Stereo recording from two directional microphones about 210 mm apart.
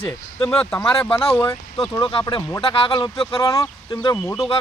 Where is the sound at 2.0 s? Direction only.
20° left (ahead or behind).